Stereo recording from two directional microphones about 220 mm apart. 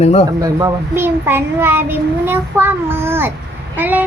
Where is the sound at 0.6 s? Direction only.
15° right (ahead or behind).